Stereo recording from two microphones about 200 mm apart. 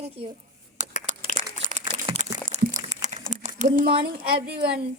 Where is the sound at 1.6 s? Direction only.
35° right (ahead or behind).